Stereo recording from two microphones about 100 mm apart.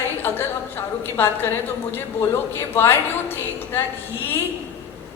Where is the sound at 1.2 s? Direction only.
25° left (ahead or behind).